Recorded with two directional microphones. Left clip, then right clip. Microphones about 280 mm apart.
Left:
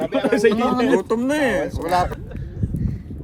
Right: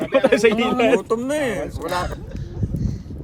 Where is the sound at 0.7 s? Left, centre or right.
Centre.